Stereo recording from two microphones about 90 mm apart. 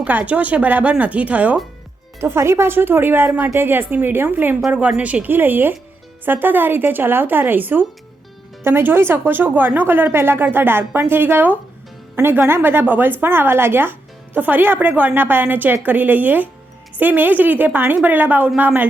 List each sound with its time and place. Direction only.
0.0 s speech: 15° right (ahead or behind)
2.2 s speech: 30° right (ahead or behind)